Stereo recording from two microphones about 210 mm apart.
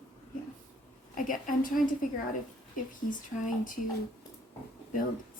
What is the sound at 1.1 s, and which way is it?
Speech, 40° left (ahead or behind).